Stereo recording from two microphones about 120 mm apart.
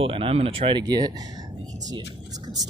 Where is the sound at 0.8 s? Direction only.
35° right (ahead or behind).